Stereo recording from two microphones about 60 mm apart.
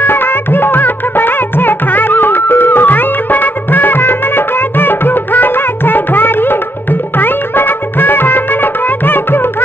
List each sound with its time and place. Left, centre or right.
0.0 s music: left